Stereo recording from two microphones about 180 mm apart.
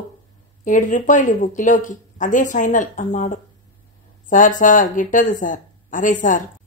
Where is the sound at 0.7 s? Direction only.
45° left (ahead or behind).